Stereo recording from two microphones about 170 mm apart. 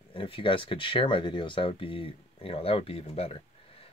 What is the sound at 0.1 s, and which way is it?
Speech, 30° left (ahead or behind).